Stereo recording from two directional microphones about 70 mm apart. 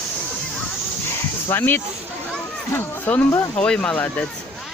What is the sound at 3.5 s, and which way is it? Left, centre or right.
Speech, centre.